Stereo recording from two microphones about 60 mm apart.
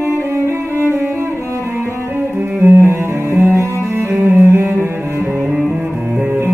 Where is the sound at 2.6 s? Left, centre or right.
Right.